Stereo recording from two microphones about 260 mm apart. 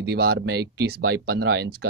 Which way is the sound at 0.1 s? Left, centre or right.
Right.